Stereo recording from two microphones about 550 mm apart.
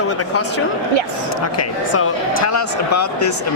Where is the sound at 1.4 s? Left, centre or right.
Left.